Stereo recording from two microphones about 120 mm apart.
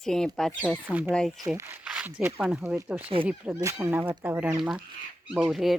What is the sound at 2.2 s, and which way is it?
Speech, 10° right (ahead or behind).